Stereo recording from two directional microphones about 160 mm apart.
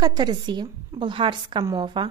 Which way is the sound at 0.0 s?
25° right (ahead or behind).